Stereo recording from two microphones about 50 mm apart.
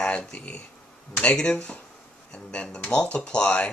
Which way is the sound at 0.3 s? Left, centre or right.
Left.